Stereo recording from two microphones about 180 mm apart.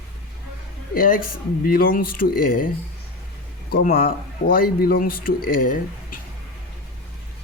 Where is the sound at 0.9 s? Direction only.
50° left (ahead or behind).